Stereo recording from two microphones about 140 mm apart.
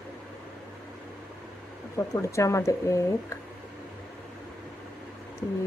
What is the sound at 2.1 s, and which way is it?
Speech, 20° left (ahead or behind).